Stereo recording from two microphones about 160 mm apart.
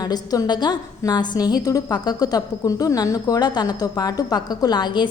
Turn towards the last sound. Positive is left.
turn(degrees=25)  # may be behind; listen again after turning